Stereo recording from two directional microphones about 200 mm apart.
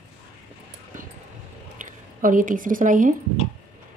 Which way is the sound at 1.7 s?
40° right (ahead or behind).